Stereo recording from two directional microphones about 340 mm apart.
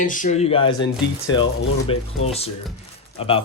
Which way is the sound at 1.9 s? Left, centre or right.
Centre.